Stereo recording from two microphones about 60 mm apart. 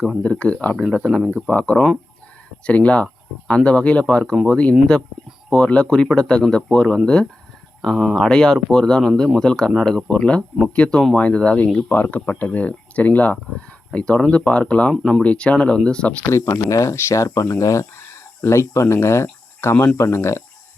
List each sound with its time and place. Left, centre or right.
0.2 s speech: left
0.8 s speech: centre
1.5 s speech: left
16.3 s speech: left
17.2 s speech: left